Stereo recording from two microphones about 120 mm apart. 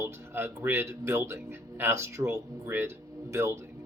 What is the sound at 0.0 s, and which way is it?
Speech, 20° right (ahead or behind).